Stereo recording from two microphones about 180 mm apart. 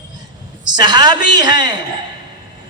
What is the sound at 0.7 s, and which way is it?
A man's voice, 25° right (ahead or behind).